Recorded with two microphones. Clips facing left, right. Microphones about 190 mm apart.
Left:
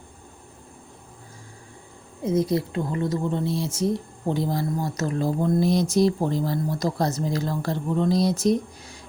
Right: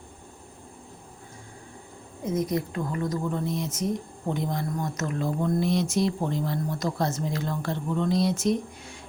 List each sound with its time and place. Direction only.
2.2 s speech: 30° left (ahead or behind)